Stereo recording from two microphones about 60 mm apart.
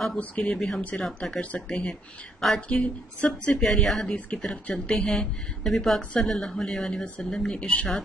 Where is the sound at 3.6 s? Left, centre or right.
Centre.